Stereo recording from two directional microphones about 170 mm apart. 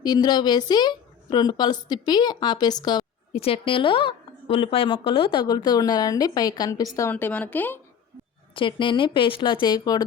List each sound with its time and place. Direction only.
0.0 s a woman's voice: 25° left (ahead or behind)
8.5 s a woman's voice: 30° left (ahead or behind)